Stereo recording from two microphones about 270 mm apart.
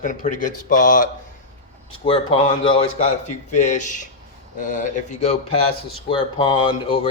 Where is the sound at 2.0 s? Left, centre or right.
Centre.